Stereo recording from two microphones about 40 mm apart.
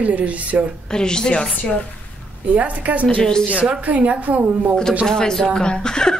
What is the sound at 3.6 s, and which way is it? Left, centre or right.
Speech, right.